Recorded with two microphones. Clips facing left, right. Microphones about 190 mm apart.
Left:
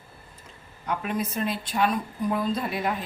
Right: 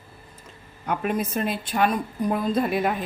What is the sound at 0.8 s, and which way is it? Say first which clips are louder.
A woman's voice: right 3 dB; 50° right (ahead or behind).